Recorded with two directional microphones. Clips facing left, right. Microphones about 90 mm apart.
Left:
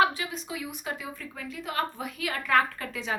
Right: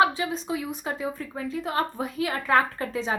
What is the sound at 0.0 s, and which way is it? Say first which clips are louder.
A woman's voice: right 3 dB; 30° right (ahead or behind).